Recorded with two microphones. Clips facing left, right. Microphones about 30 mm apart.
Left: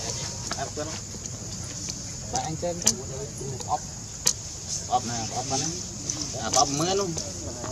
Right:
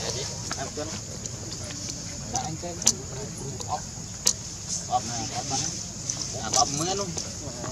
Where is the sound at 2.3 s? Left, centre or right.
Centre.